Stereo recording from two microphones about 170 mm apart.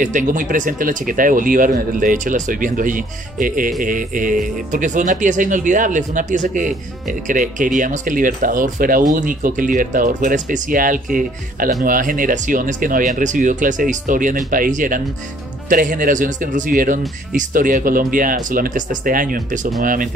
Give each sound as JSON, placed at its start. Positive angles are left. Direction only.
{"t": 0.0, "sound": "speech", "side_deg": -50}